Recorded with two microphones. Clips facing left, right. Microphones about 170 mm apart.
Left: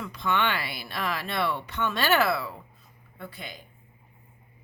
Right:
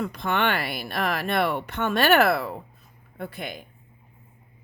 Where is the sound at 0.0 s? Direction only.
50° right (ahead or behind).